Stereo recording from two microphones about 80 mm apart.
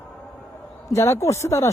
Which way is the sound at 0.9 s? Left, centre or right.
Left.